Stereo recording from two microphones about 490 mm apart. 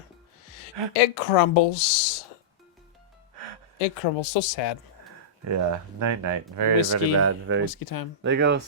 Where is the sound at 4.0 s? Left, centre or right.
Left.